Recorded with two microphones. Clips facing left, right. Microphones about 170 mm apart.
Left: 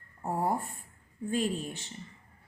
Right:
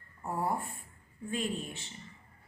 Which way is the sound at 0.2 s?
40° left (ahead or behind).